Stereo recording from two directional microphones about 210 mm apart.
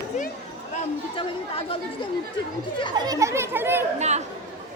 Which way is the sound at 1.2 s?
25° left (ahead or behind).